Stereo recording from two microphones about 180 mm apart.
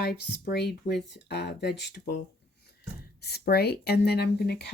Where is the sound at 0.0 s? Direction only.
60° left (ahead or behind).